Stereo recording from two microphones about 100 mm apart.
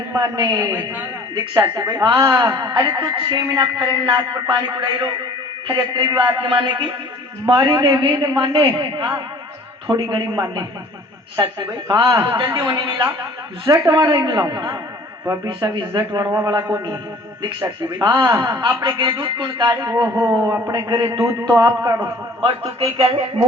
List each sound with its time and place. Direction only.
0.2 s a man's voice: 40° right (ahead or behind)
6.1 s a man's voice: 55° right (ahead or behind)
16.3 s a man's voice: 30° right (ahead or behind)
18.1 s a man's voice: 25° right (ahead or behind)
18.8 s a man's voice: 50° right (ahead or behind)
20.1 s a man's voice: 20° right (ahead or behind)
22.4 s a man's voice: 75° right (ahead or behind)